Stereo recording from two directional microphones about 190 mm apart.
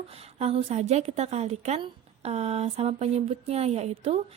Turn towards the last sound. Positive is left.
turn(degrees=-35)  # may be behind; listen again after turning